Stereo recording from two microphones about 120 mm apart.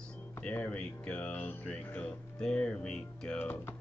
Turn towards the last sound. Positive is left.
turn(degrees=5)  # may be behind; listen again after turning